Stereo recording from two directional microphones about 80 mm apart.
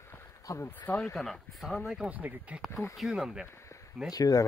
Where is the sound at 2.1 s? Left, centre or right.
Right.